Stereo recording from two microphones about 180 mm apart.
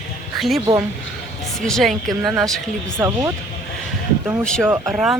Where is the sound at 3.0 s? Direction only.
15° right (ahead or behind).